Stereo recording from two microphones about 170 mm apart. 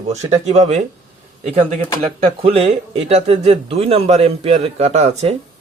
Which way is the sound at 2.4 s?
35° right (ahead or behind).